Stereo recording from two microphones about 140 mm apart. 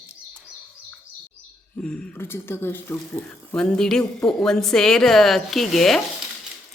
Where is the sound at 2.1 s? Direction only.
15° left (ahead or behind).